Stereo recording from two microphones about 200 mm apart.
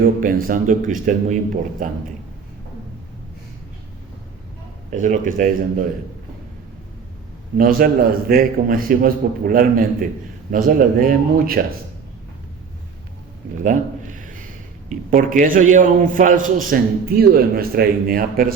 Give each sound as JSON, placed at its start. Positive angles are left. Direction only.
{"t": 0.0, "sound": "a man's voice", "side_deg": -45}
{"t": 4.9, "sound": "speech", "side_deg": -40}
{"t": 7.6, "sound": "a man's voice", "side_deg": -45}
{"t": 13.6, "sound": "a sound", "side_deg": -40}
{"t": 14.8, "sound": "a man's voice", "side_deg": -40}